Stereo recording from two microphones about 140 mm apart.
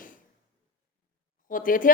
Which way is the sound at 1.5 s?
75° left (ahead or behind).